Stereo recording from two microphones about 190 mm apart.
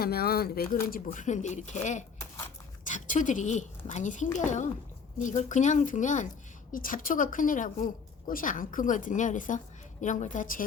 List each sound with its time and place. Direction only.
0.0 s a woman's voice: 55° left (ahead or behind)